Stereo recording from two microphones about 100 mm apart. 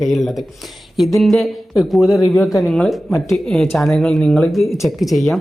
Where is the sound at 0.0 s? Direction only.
Centre (ahead or behind).